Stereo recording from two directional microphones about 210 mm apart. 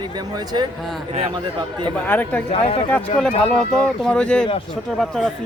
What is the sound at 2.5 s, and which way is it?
Speech, 30° left (ahead or behind).